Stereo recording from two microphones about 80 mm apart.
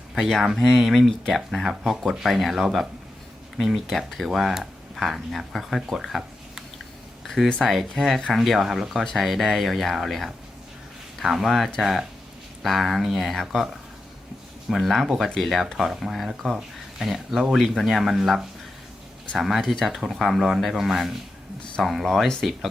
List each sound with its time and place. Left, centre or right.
0.1 s speech: centre
14.7 s speech: centre